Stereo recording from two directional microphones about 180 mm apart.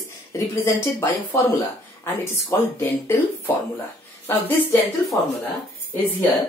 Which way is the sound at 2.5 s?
10° left (ahead or behind).